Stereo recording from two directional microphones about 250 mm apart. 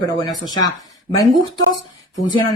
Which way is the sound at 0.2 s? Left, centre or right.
Centre.